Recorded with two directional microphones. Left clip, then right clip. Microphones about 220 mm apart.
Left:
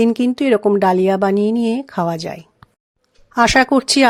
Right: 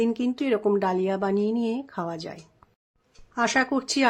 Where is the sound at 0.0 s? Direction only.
40° left (ahead or behind).